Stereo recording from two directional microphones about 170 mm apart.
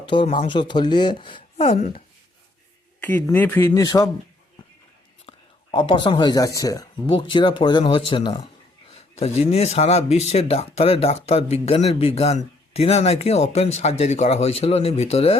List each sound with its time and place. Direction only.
0.0 s speech: 30° left (ahead or behind)
3.0 s speech: 10° left (ahead or behind)
3.7 s speech: 20° left (ahead or behind)
5.3 s whispering: 30° left (ahead or behind)
5.7 s speech: 30° left (ahead or behind)